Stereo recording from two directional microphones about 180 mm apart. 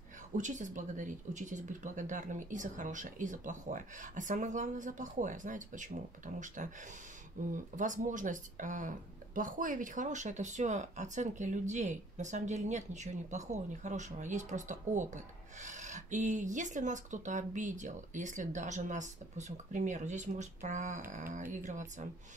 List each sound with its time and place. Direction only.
0.4 s speech: 45° right (ahead or behind)